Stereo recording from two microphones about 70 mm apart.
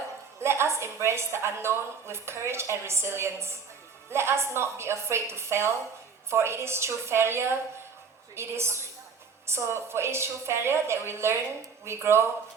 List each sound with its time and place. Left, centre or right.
0.3 s a woman's voice: right